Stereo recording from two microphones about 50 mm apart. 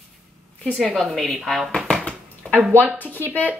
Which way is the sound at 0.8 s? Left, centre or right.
Centre.